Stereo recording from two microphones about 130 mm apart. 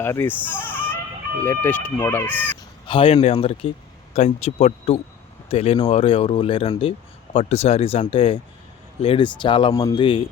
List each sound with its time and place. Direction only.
0.0 s speech: 15° left (ahead or behind)
0.5 s chicken: 10° right (ahead or behind)
1.5 s speech: 15° left (ahead or behind)
2.8 s a man's voice: 45° left (ahead or behind)
9.7 s speech: 25° left (ahead or behind)
10.0 s speech: 40° left (ahead or behind)